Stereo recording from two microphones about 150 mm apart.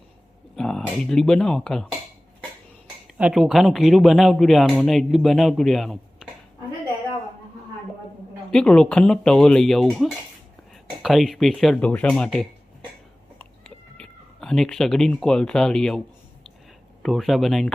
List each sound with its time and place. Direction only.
0.5 s speech: 5° left (ahead or behind)
3.2 s speech: 5° right (ahead or behind)
8.4 s speech: 5° left (ahead or behind)
13.4 s cat: 5° left (ahead or behind)
17.0 s speech: centre (ahead or behind)